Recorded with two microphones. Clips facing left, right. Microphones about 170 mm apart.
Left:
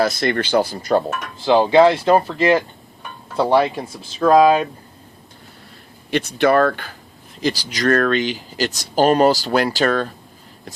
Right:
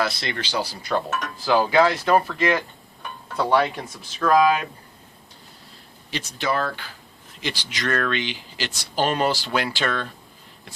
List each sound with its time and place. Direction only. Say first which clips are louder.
0.0 s speech: left 8 dB; 45° left (ahead or behind)
1.4 s speech: left 6 dB; 25° left (ahead or behind)
6.1 s speech: left 10 dB; 60° left (ahead or behind)
7.4 s speech: left 9 dB; 40° left (ahead or behind)